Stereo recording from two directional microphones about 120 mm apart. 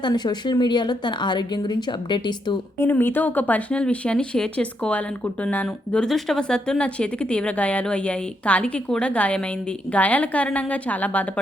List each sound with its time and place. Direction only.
0.0 s a woman's voice: 35° left (ahead or behind)
2.7 s speech: 20° left (ahead or behind)